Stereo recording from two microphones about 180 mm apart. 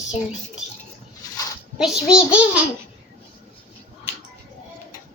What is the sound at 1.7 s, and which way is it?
Speech, 5° right (ahead or behind).